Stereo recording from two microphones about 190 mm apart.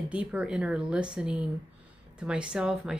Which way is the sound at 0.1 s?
5° right (ahead or behind).